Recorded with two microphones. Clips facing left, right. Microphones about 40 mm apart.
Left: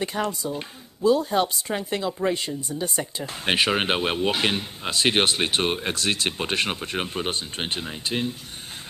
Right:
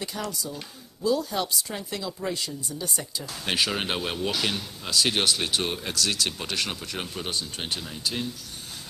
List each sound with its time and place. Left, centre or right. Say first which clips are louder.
0.0 s speech: left 6 dB; left